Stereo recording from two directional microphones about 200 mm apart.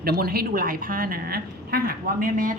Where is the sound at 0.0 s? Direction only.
50° right (ahead or behind).